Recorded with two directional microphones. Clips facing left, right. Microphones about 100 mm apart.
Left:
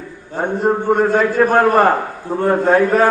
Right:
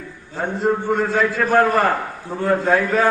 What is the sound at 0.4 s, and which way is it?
A man's voice, 45° left (ahead or behind).